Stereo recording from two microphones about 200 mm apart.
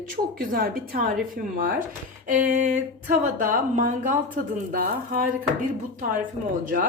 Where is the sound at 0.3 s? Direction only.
45° right (ahead or behind).